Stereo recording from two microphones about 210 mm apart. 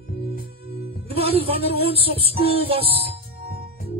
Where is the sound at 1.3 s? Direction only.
25° right (ahead or behind).